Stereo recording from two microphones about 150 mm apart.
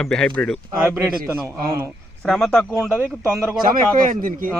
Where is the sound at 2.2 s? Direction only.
Centre (ahead or behind).